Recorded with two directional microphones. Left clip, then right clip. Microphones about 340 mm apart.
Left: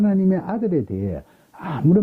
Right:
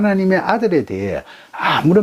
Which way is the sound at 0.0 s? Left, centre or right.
Centre.